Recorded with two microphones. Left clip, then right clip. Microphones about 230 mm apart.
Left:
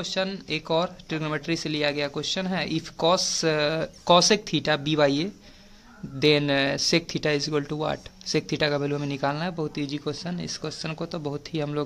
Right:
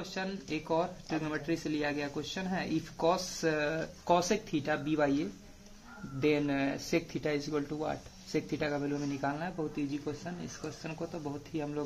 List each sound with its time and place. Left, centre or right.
0.0 s speech: left